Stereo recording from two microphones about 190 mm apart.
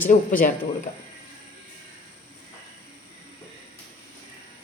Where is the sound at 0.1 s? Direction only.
45° left (ahead or behind).